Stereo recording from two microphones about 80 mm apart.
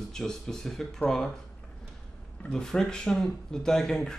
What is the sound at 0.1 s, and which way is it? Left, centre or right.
Speech, centre.